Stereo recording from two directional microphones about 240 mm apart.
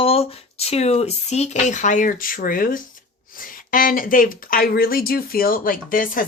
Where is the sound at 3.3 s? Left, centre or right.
Left.